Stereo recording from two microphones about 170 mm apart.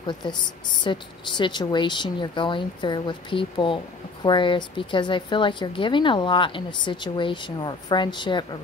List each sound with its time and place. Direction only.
0.0 s a woman's voice: 25° left (ahead or behind)